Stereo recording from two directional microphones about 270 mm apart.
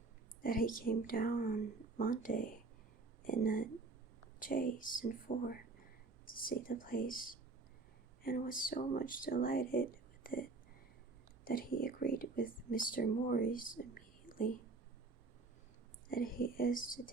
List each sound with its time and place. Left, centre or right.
0.4 s a woman's voice: left
11.4 s a woman's voice: left
16.0 s a woman's voice: left